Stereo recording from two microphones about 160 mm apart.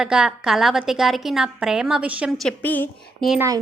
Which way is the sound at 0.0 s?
5° right (ahead or behind).